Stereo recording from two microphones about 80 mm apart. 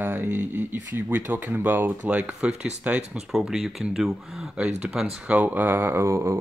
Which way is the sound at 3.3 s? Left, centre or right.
Centre.